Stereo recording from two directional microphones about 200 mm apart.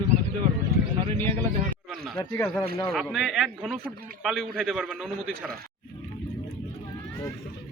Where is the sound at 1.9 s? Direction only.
Centre (ahead or behind).